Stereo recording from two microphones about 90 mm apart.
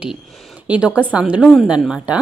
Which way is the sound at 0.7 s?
15° right (ahead or behind).